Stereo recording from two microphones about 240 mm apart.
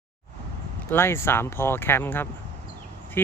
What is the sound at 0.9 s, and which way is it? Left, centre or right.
Speech, centre.